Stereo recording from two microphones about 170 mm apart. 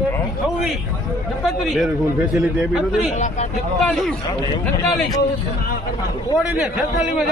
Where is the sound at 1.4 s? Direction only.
Centre (ahead or behind).